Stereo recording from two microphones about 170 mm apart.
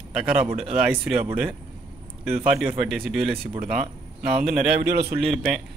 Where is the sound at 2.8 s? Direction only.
Centre (ahead or behind).